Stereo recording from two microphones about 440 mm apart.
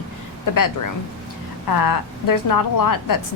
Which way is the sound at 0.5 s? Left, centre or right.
Left.